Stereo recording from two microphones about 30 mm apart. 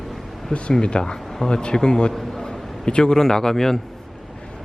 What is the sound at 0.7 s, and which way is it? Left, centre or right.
Speech, left.